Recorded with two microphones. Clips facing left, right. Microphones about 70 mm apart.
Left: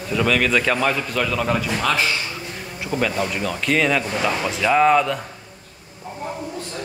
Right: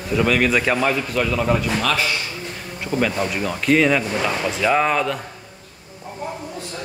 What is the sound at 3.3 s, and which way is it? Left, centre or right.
Speech, centre.